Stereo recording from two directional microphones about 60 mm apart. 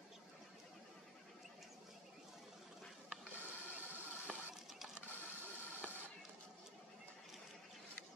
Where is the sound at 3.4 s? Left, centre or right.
Right.